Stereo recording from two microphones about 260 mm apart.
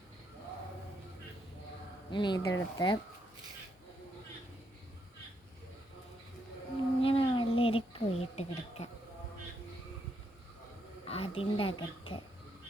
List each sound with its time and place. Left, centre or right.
2.1 s speech: centre
7.0 s a sound: left
11.0 s speech: left